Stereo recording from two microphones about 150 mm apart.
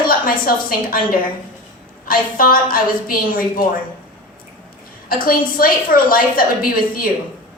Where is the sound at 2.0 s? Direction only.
70° left (ahead or behind).